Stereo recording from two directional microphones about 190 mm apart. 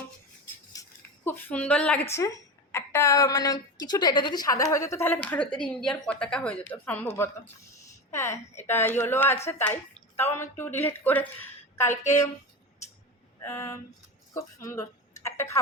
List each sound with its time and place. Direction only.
0.7 s a sound: 15° left (ahead or behind)
2.1 s speech: 15° left (ahead or behind)
13.4 s speech: 15° left (ahead or behind)